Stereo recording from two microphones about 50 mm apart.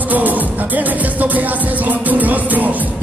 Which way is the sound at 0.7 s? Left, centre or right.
Right.